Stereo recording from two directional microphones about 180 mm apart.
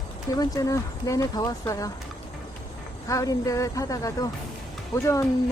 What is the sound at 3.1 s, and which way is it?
Speech, 20° left (ahead or behind).